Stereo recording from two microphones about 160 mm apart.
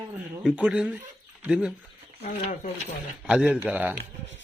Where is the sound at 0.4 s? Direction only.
10° right (ahead or behind).